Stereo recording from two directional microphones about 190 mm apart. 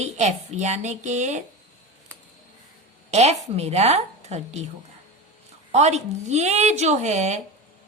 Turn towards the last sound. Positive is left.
turn(degrees=-35)  # may be behind; listen again after turning